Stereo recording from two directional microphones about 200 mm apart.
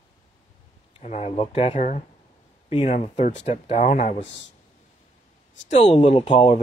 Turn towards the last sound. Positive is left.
turn(degrees=30)  # may be behind; listen again after turning